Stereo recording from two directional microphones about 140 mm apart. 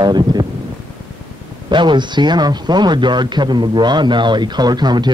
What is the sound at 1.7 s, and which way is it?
Speech, 35° right (ahead or behind).